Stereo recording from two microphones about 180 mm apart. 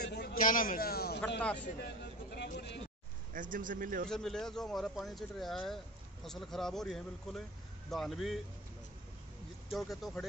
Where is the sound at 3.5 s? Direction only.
50° right (ahead or behind).